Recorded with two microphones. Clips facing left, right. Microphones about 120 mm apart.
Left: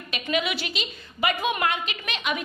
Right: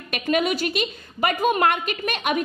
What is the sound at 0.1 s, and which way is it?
A woman's voice, 50° right (ahead or behind).